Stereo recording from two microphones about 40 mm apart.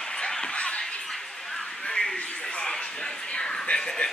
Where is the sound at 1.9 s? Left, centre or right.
Centre.